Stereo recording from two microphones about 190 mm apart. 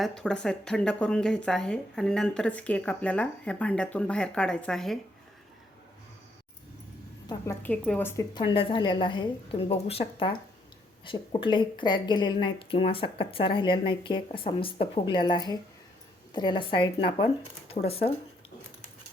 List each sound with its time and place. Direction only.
0.0 s speech: 5° left (ahead or behind)
7.3 s a woman's voice: 10° left (ahead or behind)
8.4 s speech: 25° left (ahead or behind)